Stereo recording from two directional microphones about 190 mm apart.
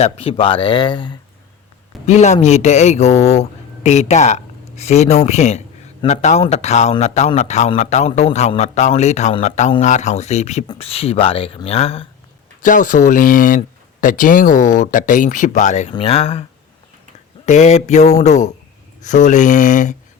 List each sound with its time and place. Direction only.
0.0 s speech: 30° left (ahead or behind)
2.0 s a man's voice: 35° left (ahead or behind)
12.6 s a man's voice: 45° left (ahead or behind)
17.4 s a man's voice: 40° left (ahead or behind)